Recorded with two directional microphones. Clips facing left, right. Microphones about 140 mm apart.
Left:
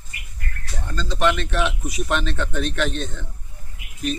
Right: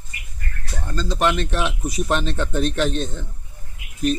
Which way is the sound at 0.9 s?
40° right (ahead or behind).